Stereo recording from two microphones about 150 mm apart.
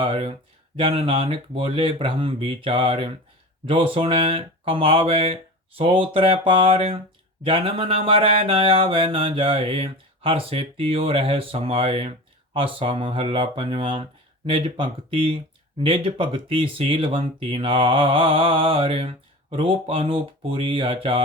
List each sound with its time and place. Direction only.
0.0 s speech: 40° right (ahead or behind)